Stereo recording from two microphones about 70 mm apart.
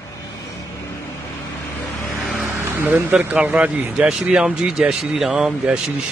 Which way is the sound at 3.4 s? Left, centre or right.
Centre.